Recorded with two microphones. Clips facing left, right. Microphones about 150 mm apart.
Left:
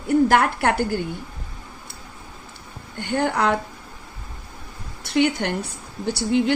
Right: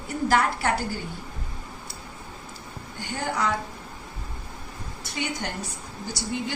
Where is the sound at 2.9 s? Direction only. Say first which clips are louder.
Left 7 dB; 60° left (ahead or behind).